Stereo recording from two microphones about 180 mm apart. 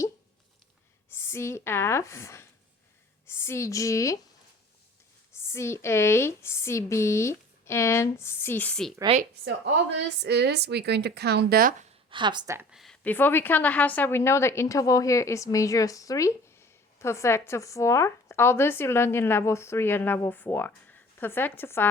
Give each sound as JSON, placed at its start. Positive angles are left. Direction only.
{"t": 1.1, "sound": "a woman's voice", "side_deg": 15}
{"t": 5.4, "sound": "speech", "side_deg": 15}
{"t": 9.1, "sound": "speech", "side_deg": -30}
{"t": 10.2, "sound": "speech", "side_deg": -65}
{"t": 12.1, "sound": "speech", "side_deg": -25}
{"t": 12.5, "sound": "speech", "side_deg": 0}